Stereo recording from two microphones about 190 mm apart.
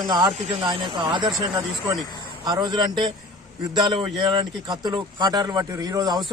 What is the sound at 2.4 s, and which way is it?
Speech, 20° right (ahead or behind).